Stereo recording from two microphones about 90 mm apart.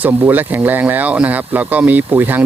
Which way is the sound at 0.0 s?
20° right (ahead or behind).